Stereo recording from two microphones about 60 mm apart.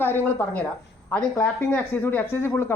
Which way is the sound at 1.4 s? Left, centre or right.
Left.